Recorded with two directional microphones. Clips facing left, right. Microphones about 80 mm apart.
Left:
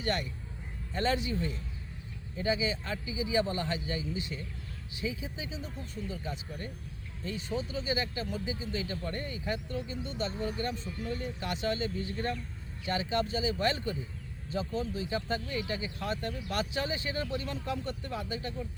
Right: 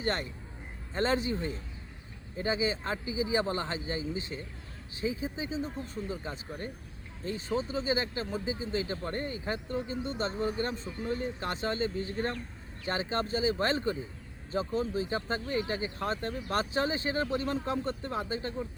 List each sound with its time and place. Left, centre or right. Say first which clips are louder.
0.0 s speech: right 1 dB; right